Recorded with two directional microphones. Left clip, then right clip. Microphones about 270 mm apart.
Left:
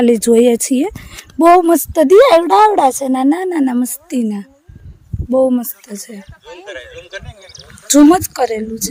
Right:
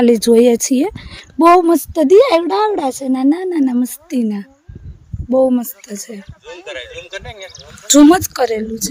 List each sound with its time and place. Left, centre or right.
0.0 s speech: centre
6.4 s a man's voice: right
7.9 s speech: centre